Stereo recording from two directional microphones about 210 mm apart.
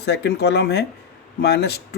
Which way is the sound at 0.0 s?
50° left (ahead or behind).